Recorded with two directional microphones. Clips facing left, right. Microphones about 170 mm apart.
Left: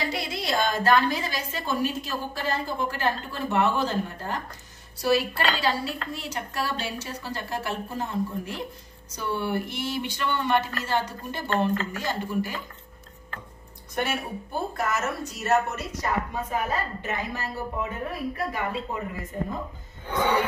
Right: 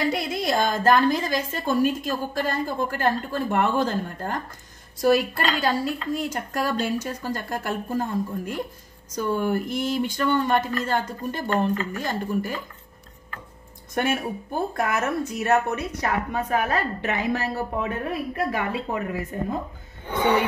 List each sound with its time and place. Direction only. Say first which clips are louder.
0.1 s a woman's voice: right 4 dB; 50° right (ahead or behind)
11.4 s speech: right 1 dB; 10° right (ahead or behind)
12.0 s a woman's voice: right 2 dB; 50° right (ahead or behind)
13.9 s speech: right 4 dB; 50° right (ahead or behind); by 17.9 s 75° right (ahead or behind)
18.5 s speech: right 4 dB; 90° right